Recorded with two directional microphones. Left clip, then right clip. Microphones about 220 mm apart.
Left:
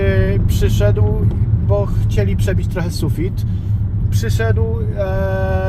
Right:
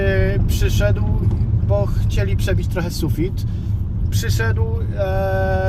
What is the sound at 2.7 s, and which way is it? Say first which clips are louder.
Speech: even; 15° left (ahead or behind).